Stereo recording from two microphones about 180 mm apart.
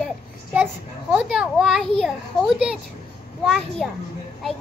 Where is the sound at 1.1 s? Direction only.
5° right (ahead or behind).